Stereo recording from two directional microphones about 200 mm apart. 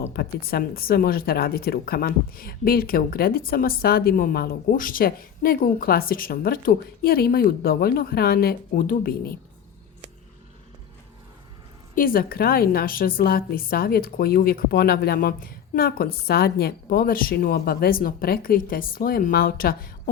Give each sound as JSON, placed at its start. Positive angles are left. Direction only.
{"t": 0.1, "sound": "speech", "side_deg": 50}
{"t": 11.9, "sound": "speech", "side_deg": 45}